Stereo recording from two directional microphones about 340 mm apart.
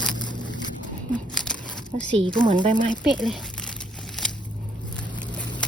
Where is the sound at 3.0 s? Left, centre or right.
Centre.